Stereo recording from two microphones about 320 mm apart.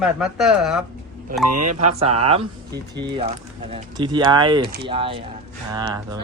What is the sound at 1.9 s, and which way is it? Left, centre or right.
Speech, centre.